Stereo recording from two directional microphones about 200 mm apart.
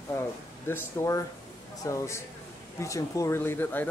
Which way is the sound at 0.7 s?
10° left (ahead or behind).